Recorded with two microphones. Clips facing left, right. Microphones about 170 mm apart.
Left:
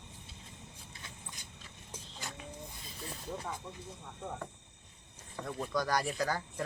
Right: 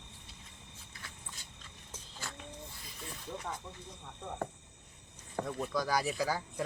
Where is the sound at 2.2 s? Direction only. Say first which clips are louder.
Even; 20° left (ahead or behind).